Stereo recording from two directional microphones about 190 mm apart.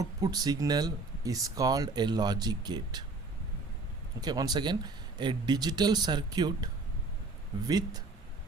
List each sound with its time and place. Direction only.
0.0 s speech: 20° right (ahead or behind)
4.2 s speech: 20° right (ahead or behind)
7.7 s speech: 20° right (ahead or behind)